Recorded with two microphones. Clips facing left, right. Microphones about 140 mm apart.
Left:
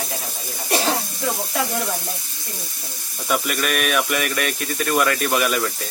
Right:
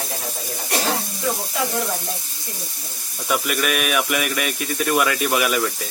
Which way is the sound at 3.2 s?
Centre (ahead or behind).